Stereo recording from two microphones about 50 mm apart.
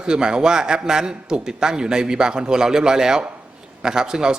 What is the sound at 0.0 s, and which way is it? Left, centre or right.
A man's voice, centre.